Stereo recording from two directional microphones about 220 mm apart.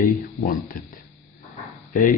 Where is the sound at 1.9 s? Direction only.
40° left (ahead or behind).